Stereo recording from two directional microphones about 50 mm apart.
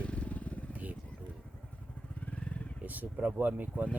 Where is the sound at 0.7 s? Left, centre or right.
Right.